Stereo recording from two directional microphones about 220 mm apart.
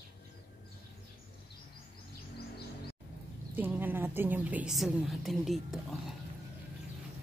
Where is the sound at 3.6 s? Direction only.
10° right (ahead or behind).